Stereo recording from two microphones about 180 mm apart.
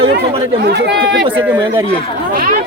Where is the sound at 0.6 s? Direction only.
65° right (ahead or behind).